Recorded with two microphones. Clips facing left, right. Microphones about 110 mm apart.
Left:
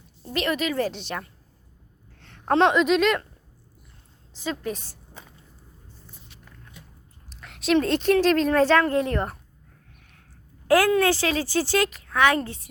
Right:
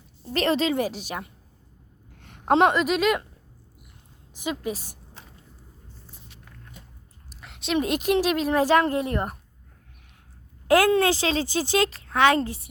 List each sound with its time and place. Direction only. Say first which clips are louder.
0.3 s speech: right 3 dB; 30° right (ahead or behind)
0.8 s a woman's voice: left 1 dB; 10° right (ahead or behind)
2.1 s a sound: right 1 dB; 15° right (ahead or behind)
2.6 s speech: left 2 dB; 5° right (ahead or behind)
4.4 s a woman's voice: even; 15° right (ahead or behind)
7.3 s a sound: left 6 dB; centre (ahead or behind)
7.8 s a woman's voice: left 1 dB; 15° right (ahead or behind)
10.7 s speech: even; 25° right (ahead or behind)